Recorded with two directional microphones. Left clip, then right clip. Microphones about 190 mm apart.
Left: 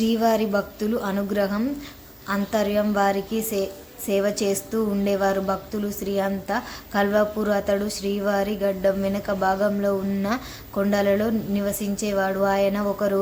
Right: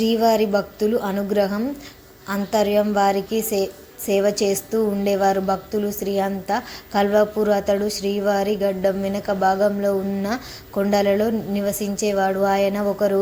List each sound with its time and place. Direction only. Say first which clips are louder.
0.0 s a woman's voice: right 4 dB; 10° right (ahead or behind)